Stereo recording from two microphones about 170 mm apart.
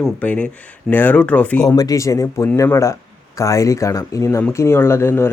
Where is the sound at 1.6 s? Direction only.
20° left (ahead or behind).